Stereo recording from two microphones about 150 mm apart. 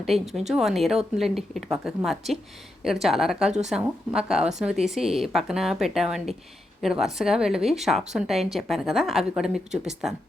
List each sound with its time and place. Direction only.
0.0 s speech: centre (ahead or behind)